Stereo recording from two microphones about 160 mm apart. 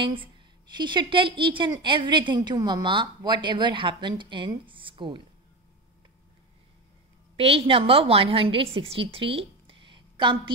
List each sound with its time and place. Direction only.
0.0 s a woman's voice: 35° right (ahead or behind)
7.3 s a woman's voice: 35° right (ahead or behind)
9.1 s a sound: 35° right (ahead or behind)